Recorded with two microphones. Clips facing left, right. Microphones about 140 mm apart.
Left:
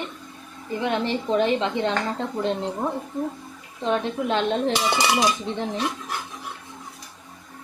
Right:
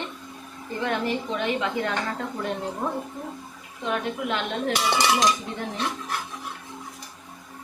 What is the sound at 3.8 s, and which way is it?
Dishes, 30° left (ahead or behind).